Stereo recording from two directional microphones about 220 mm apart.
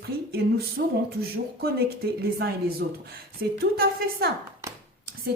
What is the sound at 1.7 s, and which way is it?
A woman's voice, 45° right (ahead or behind).